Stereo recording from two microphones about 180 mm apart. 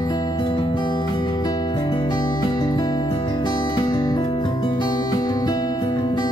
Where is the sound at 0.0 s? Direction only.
20° left (ahead or behind).